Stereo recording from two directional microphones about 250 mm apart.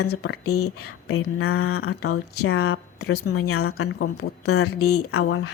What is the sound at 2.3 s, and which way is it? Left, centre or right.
Speech, left.